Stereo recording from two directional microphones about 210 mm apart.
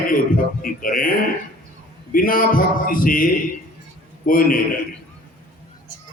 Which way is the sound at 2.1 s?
40° left (ahead or behind).